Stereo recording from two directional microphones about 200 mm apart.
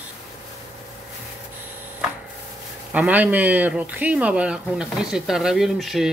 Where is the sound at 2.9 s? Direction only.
5° right (ahead or behind).